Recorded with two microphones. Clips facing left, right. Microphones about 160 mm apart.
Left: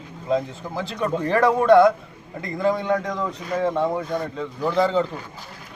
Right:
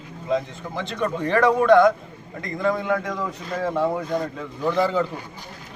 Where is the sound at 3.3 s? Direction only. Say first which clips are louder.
Left 3 dB; 25° left (ahead or behind).